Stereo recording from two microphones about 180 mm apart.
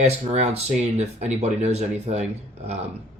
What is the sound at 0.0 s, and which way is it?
Speech, 40° right (ahead or behind).